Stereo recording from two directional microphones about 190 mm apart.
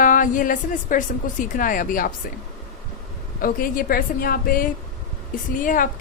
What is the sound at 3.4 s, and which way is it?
A woman's voice, 50° left (ahead or behind).